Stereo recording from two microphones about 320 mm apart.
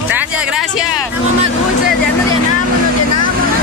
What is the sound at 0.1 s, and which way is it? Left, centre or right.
Music, centre.